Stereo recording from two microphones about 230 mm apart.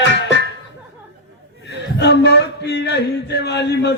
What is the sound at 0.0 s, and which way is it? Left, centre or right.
Music, left.